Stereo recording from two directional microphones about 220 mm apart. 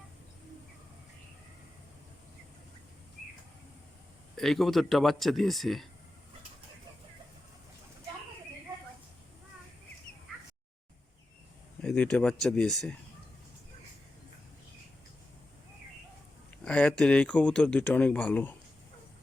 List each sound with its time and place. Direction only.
4.4 s speech: centre (ahead or behind)
11.8 s speech: 5° left (ahead or behind)
16.6 s speech: 5° left (ahead or behind)